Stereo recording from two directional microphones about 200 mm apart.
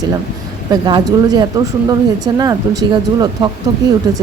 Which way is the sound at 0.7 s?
20° right (ahead or behind).